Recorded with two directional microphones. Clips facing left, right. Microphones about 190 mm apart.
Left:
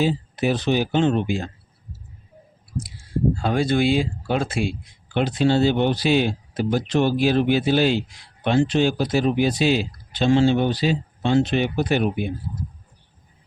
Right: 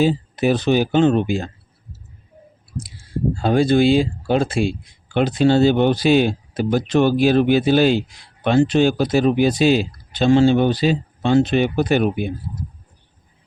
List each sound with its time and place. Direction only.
0.0 s speech: 45° right (ahead or behind)
3.4 s speech: 30° right (ahead or behind)
5.1 s speech: 45° right (ahead or behind)